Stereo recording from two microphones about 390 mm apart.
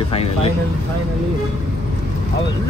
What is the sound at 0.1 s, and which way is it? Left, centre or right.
Speech, centre.